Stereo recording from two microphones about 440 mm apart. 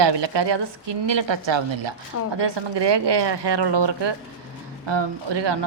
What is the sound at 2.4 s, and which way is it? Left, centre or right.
A woman's voice, right.